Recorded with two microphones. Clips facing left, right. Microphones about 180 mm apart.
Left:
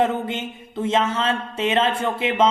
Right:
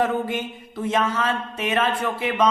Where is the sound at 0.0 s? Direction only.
25° left (ahead or behind).